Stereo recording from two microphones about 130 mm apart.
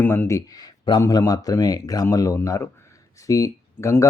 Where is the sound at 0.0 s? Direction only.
15° left (ahead or behind).